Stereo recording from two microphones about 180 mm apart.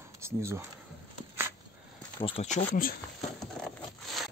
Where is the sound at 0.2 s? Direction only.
15° right (ahead or behind).